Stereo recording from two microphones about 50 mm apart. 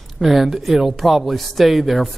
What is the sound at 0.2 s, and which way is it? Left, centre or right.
Speech, centre.